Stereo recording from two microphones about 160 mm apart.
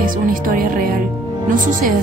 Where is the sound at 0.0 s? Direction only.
60° right (ahead or behind).